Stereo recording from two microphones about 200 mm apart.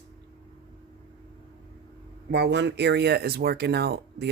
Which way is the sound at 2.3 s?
60° right (ahead or behind).